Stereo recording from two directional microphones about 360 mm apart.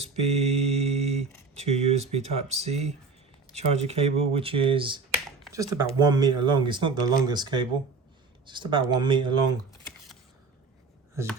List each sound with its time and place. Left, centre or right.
0.0 s mantra: centre
1.5 s speech: centre